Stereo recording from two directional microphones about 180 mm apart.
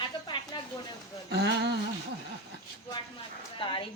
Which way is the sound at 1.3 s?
70° right (ahead or behind).